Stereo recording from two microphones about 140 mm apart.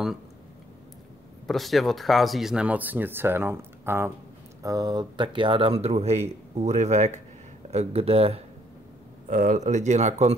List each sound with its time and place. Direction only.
1.5 s speech: centre (ahead or behind); by 4.1 s 15° right (ahead or behind)
4.6 s speech: 25° right (ahead or behind); by 8.5 s 45° right (ahead or behind)
9.3 s speech: 70° right (ahead or behind); by 10.3 s 55° right (ahead or behind)